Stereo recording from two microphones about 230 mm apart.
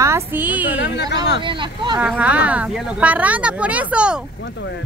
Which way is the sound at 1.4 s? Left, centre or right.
Right.